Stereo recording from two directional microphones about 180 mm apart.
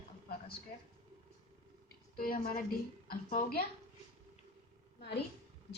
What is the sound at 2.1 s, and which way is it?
A woman's voice, 55° left (ahead or behind).